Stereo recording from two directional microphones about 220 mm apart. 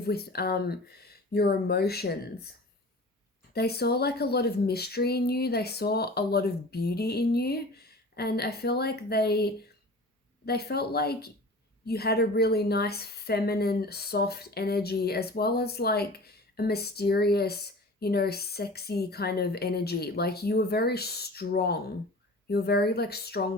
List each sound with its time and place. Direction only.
0.0 s a woman's voice: 45° left (ahead or behind)
3.5 s a woman's voice: 45° left (ahead or behind)